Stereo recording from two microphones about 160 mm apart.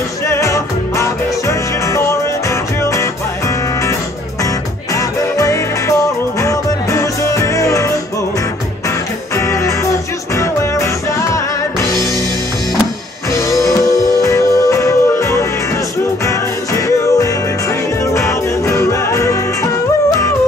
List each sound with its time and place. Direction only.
0.3 s music: 20° left (ahead or behind)
4.9 s music: 20° left (ahead or behind)
9.5 s music: 20° left (ahead or behind)
13.3 s music: 20° left (ahead or behind)